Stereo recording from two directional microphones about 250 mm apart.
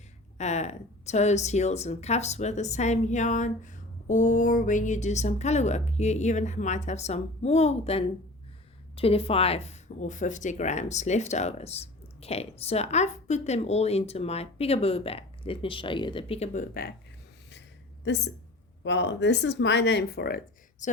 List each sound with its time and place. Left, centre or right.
0.3 s speech: left
18.8 s speech: left